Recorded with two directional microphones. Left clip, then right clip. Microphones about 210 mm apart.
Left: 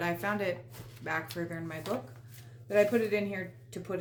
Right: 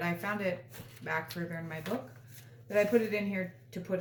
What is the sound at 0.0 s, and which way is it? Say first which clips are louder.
A woman's voice: left 2 dB; 45° left (ahead or behind).